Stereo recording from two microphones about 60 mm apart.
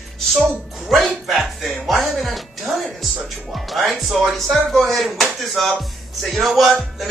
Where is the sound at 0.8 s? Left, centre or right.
Centre.